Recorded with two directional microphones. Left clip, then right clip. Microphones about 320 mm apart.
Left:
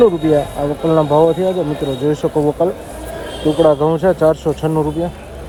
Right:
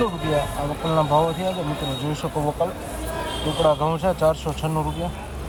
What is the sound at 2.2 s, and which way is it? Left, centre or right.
Speech, left.